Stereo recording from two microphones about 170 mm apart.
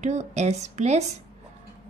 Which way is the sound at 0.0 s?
40° right (ahead or behind).